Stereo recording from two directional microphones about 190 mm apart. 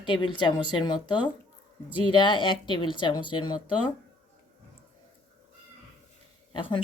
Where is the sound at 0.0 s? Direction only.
25° left (ahead or behind).